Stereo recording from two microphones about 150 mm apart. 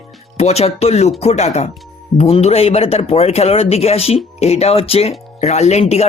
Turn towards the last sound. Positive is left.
turn(degrees=45)  # may be behind; listen again after turning